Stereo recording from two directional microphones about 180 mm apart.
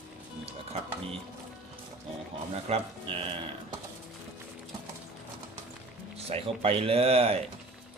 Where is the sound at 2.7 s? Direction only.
30° right (ahead or behind).